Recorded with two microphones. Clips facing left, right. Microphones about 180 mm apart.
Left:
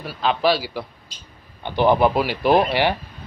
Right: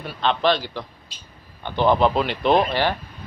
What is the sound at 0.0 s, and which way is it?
A man's voice, 5° left (ahead or behind).